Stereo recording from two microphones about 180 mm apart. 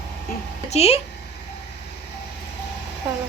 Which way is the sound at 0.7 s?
35° left (ahead or behind).